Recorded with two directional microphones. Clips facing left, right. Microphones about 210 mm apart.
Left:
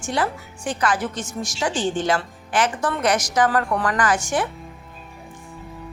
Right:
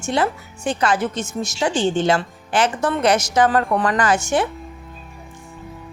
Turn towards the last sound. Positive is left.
turn(degrees=-25)  # may be behind; listen again after turning